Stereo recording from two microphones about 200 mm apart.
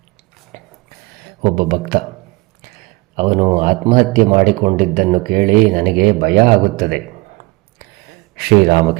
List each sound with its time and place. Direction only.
0.5 s a sound: 35° right (ahead or behind)
1.2 s speech: 45° right (ahead or behind)
3.2 s speech: 35° right (ahead or behind)